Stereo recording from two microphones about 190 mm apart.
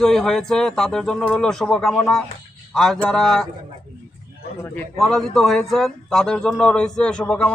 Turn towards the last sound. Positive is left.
turn(degrees=5)  # may be behind; listen again after turning